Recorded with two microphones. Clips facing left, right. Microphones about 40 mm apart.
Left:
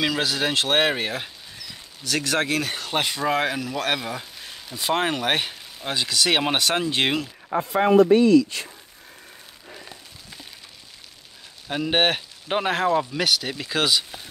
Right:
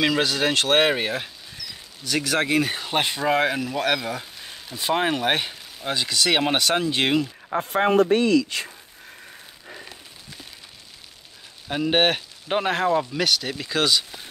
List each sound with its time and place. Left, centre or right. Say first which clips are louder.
0.0 s speech: right 2 dB; centre
7.6 s speech: left 2 dB; right
8.1 s speech: left 3 dB; right
11.6 s speech: right 1 dB; centre